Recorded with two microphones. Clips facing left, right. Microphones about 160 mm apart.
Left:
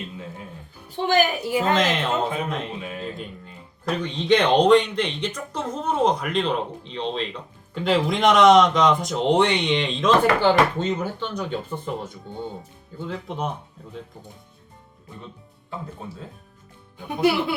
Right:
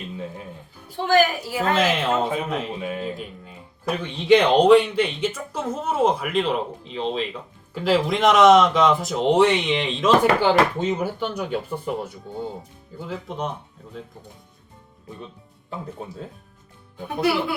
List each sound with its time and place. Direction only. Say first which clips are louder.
1.0 s a woman's voice: right 2 dB; 20° left (ahead or behind)
1.7 s speech: right 1 dB; 5° right (ahead or behind)